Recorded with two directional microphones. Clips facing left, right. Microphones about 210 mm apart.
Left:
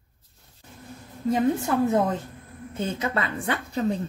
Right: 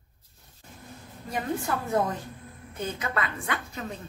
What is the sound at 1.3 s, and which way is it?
A woman's voice, 20° left (ahead or behind).